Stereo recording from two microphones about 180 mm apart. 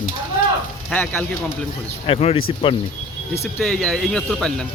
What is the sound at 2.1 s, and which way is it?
Speech, 30° left (ahead or behind).